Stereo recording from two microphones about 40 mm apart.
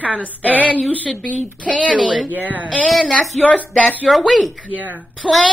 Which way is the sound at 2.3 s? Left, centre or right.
Right.